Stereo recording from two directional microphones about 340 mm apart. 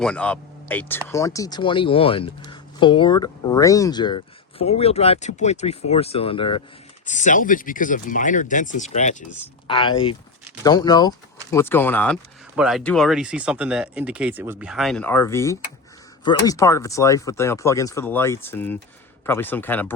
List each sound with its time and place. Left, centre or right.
0.0 s speech: centre